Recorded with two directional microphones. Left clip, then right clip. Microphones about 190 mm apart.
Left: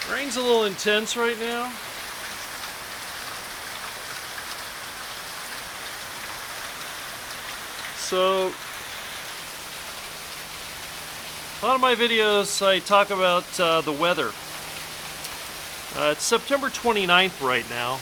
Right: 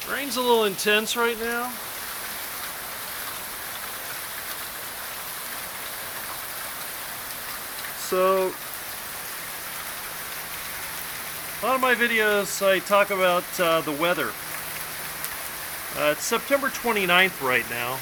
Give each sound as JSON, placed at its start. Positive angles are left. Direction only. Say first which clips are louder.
{"t": 0.1, "sound": "speech", "louder": "right 1 dB", "side_deg": 0}
{"t": 8.1, "sound": "speech", "louder": "right 1 dB", "side_deg": 5}
{"t": 11.6, "sound": "speech", "louder": "left 1 dB", "side_deg": 15}
{"t": 16.0, "sound": "speech", "louder": "left 1 dB", "side_deg": 15}